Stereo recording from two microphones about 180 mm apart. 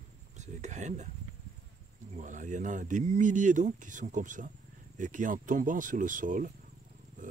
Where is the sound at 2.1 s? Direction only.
45° right (ahead or behind).